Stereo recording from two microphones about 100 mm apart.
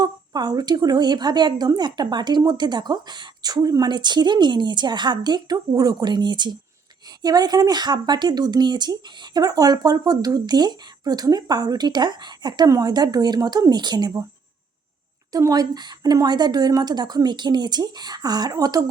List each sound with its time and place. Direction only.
0.0 s a woman's voice: 40° right (ahead or behind)
15.3 s a woman's voice: 35° right (ahead or behind)